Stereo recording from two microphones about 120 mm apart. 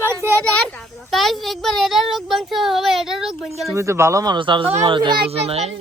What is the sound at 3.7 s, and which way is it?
Speech, 25° right (ahead or behind).